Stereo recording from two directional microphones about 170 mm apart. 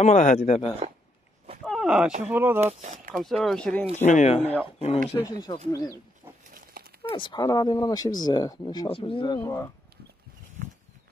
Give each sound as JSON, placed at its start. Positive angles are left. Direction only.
{"t": 0.0, "sound": "speech", "side_deg": 45}
{"t": 1.6, "sound": "a sound", "side_deg": 0}
{"t": 2.2, "sound": "speech", "side_deg": -10}
{"t": 2.6, "sound": "speech", "side_deg": -45}
{"t": 3.1, "sound": "speech", "side_deg": 0}
{"t": 3.9, "sound": "speech", "side_deg": 45}
{"t": 5.1, "sound": "speech", "side_deg": 25}
{"t": 6.8, "sound": "a sound", "side_deg": -60}
{"t": 7.1, "sound": "speech", "side_deg": 30}
{"t": 8.6, "sound": "speech", "side_deg": 30}
{"t": 9.4, "sound": "speech", "side_deg": 15}